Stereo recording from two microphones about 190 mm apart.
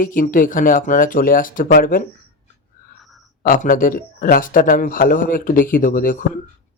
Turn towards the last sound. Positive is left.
turn(degrees=45)  # may be behind; listen again after turning